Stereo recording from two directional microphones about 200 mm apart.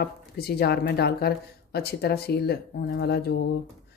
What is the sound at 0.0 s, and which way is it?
Speech, 50° left (ahead or behind).